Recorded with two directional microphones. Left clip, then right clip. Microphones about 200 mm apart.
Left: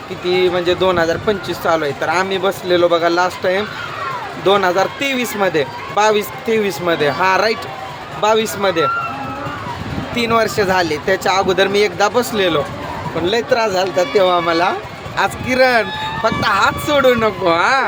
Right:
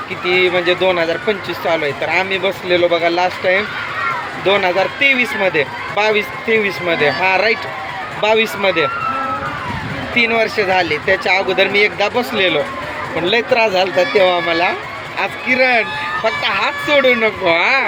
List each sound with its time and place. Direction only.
0.3 s speech: 15° left (ahead or behind)
10.2 s speech: 20° left (ahead or behind)
13.9 s speech: 20° left (ahead or behind)